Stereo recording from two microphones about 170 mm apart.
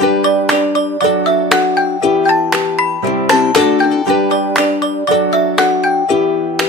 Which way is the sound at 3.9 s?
Centre (ahead or behind).